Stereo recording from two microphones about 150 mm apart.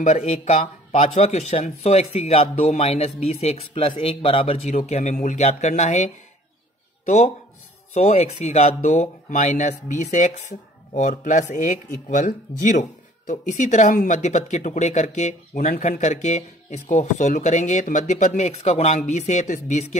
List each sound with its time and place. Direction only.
0.0 s speech: 50° left (ahead or behind)